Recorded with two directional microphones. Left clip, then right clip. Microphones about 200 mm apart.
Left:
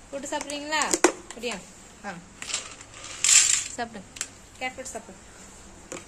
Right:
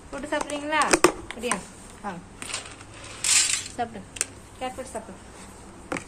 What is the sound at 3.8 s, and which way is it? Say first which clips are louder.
Speech: right 3 dB; 20° left (ahead or behind).